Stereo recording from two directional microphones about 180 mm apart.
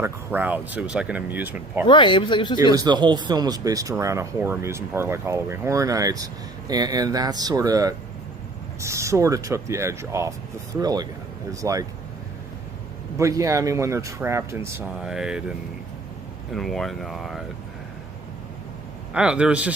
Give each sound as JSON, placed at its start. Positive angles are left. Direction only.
{"t": 0.0, "sound": "speech", "side_deg": -10}
{"t": 1.9, "sound": "speech", "side_deg": 25}
{"t": 2.7, "sound": "speech", "side_deg": -20}
{"t": 13.1, "sound": "speech", "side_deg": -15}
{"t": 15.0, "sound": "speech", "side_deg": -5}
{"t": 19.1, "sound": "speech", "side_deg": -5}